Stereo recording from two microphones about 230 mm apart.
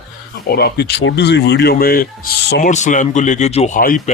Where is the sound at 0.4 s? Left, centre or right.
Left.